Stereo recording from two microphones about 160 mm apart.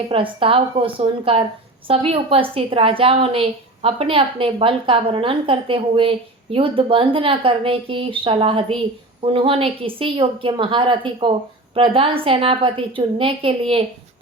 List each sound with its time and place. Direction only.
0.1 s a woman's voice: 35° right (ahead or behind)